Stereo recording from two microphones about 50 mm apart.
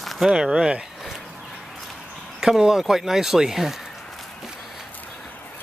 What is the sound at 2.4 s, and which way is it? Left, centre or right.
Speech, centre.